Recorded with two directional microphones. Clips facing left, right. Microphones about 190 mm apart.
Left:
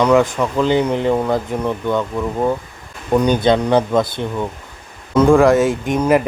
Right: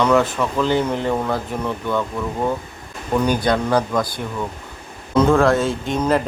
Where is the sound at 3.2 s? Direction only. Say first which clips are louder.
Left 4 dB; 20° left (ahead or behind).